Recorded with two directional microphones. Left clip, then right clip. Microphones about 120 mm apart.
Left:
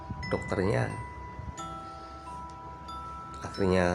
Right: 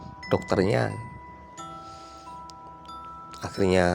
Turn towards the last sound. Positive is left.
turn(degrees=-90)